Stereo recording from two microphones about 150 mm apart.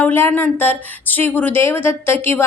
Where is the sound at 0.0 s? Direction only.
15° left (ahead or behind).